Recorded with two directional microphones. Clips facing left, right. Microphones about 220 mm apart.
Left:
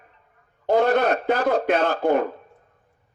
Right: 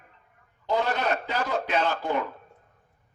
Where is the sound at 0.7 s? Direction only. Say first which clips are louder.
Left 8 dB; 55° left (ahead or behind).